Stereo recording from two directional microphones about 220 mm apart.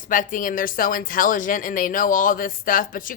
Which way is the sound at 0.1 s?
35° left (ahead or behind).